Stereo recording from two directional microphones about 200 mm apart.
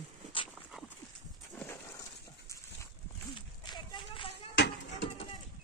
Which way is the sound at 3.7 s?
25° left (ahead or behind).